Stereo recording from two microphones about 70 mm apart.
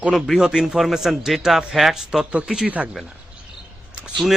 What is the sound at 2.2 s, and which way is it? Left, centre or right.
Speech, centre.